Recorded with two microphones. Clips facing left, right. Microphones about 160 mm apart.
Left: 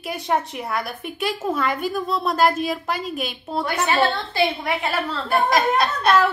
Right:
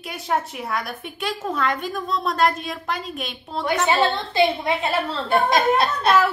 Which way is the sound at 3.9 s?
20° right (ahead or behind).